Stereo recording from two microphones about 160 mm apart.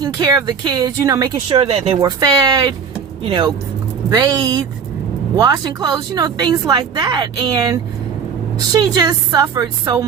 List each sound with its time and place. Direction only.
0.0 s a woman's voice: 25° right (ahead or behind)
2.0 s a woman's voice: 25° right (ahead or behind)